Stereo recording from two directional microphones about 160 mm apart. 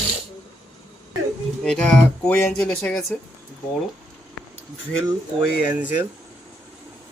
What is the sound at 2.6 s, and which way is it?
Music, 5° left (ahead or behind).